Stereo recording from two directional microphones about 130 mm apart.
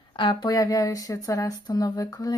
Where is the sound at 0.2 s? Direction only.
35° left (ahead or behind).